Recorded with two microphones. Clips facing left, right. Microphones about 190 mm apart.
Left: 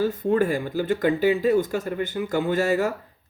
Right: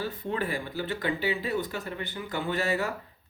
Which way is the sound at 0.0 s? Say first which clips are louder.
Left 10 dB; 45° left (ahead or behind).